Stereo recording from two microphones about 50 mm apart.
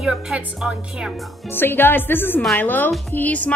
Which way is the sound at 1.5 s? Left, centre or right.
Left.